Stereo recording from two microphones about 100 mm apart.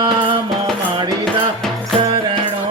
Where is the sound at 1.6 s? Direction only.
5° left (ahead or behind).